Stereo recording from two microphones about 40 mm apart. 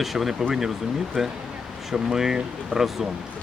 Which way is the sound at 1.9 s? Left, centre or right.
Centre.